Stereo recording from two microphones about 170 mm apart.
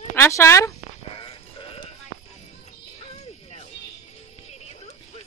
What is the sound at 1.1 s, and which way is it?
Music, 35° left (ahead or behind).